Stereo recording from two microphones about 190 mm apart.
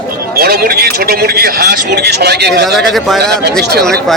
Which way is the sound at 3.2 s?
60° right (ahead or behind).